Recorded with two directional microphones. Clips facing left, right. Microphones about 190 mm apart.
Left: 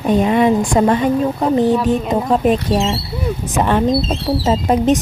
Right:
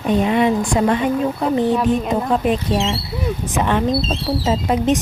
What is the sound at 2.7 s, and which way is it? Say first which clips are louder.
Speech: left 3 dB; 45° left (ahead or behind).